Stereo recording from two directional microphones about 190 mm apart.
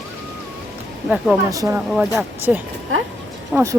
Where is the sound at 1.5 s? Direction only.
15° right (ahead or behind).